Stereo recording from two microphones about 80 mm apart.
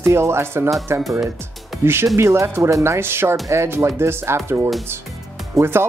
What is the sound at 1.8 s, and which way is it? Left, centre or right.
Speech, right.